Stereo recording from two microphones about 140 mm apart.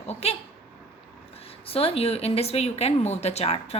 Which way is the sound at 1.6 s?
45° left (ahead or behind).